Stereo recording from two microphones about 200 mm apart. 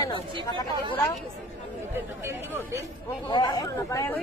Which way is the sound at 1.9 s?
10° right (ahead or behind).